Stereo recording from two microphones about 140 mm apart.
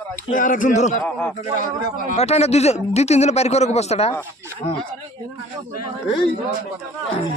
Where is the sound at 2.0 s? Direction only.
50° left (ahead or behind).